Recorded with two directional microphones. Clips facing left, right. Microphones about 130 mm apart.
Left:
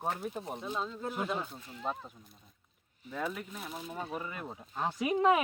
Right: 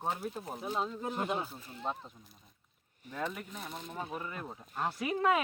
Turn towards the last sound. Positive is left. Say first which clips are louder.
# left 3 dB
turn(degrees=15)  # may be behind; listen again after turning